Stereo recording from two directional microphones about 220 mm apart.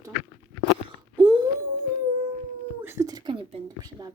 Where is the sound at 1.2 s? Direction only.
25° right (ahead or behind).